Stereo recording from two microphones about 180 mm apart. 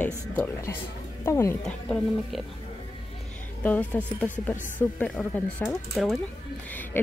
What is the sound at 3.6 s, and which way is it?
Speech, 10° left (ahead or behind).